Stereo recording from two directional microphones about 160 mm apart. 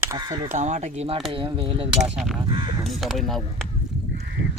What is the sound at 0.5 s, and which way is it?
Speech, 50° right (ahead or behind).